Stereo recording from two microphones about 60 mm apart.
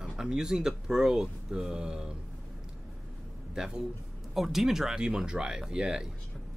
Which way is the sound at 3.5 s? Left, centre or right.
Centre.